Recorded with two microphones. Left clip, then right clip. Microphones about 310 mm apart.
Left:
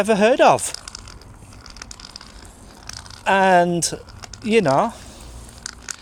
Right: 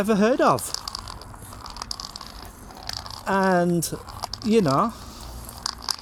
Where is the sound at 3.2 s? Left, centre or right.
Left.